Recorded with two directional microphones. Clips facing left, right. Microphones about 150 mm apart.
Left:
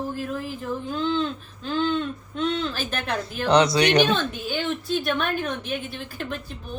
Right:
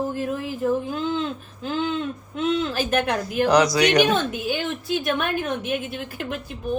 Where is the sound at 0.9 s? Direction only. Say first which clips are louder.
Even; 5° right (ahead or behind).